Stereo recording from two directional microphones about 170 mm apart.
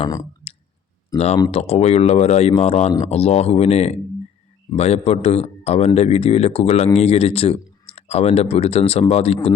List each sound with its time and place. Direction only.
1.1 s speech: 20° left (ahead or behind)
1.5 s a man's voice: 35° left (ahead or behind)